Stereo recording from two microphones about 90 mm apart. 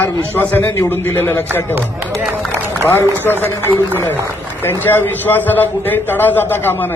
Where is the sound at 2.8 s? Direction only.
25° left (ahead or behind).